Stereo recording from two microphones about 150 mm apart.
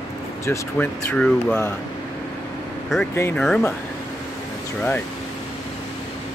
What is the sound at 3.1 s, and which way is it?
Speech, 15° left (ahead or behind).